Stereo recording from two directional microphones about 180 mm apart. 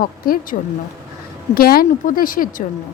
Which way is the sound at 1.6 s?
55° left (ahead or behind).